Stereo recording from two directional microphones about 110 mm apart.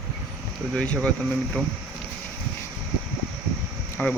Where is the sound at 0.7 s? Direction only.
10° left (ahead or behind).